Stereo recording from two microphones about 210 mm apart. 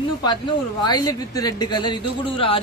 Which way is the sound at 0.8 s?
20° left (ahead or behind).